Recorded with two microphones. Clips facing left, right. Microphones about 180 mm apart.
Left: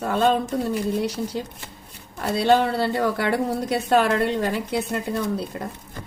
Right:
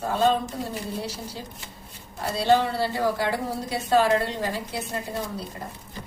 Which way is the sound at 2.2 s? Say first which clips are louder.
Left 3 dB; 60° left (ahead or behind).